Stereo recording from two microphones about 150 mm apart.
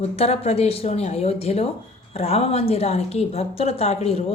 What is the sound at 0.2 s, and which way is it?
A woman's voice, 45° left (ahead or behind).